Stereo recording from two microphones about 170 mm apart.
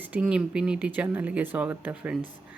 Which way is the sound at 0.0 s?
10° right (ahead or behind).